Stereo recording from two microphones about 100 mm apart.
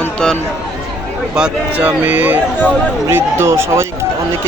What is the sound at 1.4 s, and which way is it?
Speech, 15° right (ahead or behind).